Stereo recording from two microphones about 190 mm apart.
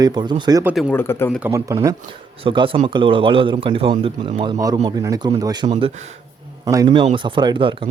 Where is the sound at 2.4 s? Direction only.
25° right (ahead or behind).